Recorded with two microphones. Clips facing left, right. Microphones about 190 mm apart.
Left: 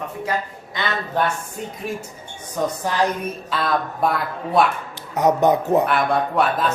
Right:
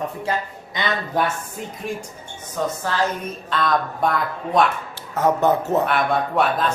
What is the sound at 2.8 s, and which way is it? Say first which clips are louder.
Speech: left 2 dB; 15° left (ahead or behind).